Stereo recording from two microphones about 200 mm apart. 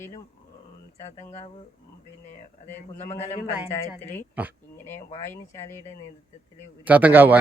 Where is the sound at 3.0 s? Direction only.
35° left (ahead or behind).